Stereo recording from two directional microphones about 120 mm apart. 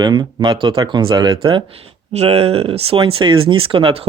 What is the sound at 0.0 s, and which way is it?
Speech, 35° right (ahead or behind).